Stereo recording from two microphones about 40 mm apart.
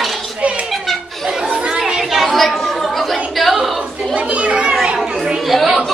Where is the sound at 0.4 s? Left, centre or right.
Right.